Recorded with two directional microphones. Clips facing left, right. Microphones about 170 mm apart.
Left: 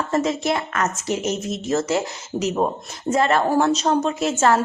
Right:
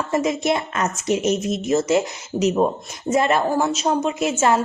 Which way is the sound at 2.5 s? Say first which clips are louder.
Right 2 dB; 5° right (ahead or behind).